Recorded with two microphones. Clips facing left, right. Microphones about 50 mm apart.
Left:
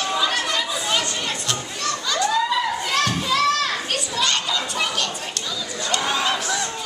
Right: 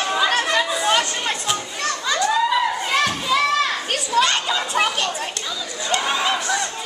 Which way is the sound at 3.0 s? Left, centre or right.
Centre.